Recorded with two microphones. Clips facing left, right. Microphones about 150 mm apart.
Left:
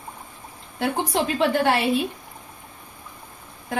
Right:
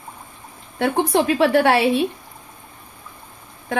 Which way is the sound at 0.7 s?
65° right (ahead or behind).